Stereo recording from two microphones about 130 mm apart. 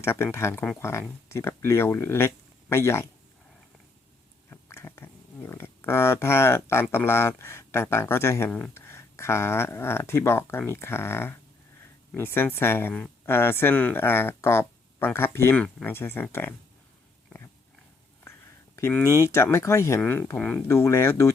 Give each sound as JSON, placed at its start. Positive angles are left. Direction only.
{"t": 0.0, "sound": "speech", "side_deg": 20}
{"t": 4.4, "sound": "a sound", "side_deg": 20}
{"t": 6.8, "sound": "speech", "side_deg": 15}
{"t": 18.8, "sound": "speech", "side_deg": 20}
{"t": 20.7, "sound": "speech", "side_deg": 20}